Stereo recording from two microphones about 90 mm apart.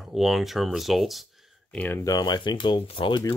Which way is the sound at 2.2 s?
55° left (ahead or behind).